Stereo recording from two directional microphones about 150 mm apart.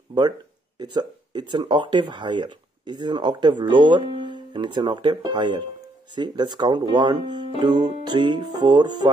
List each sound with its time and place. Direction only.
0.7 s speech: 30° right (ahead or behind)